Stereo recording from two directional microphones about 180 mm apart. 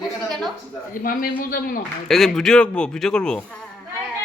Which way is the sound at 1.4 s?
55° left (ahead or behind).